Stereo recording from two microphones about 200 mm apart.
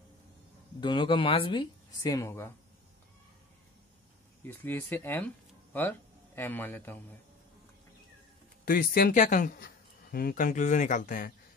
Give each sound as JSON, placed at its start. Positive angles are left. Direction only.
{"t": 0.7, "sound": "speech", "side_deg": 20}
{"t": 4.5, "sound": "speech", "side_deg": 10}
{"t": 8.6, "sound": "speech", "side_deg": 50}